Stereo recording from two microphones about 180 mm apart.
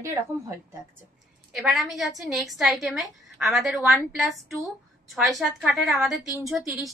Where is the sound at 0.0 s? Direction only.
15° right (ahead or behind).